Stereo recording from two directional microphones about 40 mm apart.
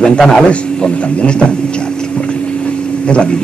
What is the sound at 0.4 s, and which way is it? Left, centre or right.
A man's voice, left.